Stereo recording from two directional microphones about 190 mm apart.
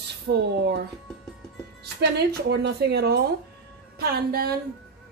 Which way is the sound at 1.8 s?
60° right (ahead or behind).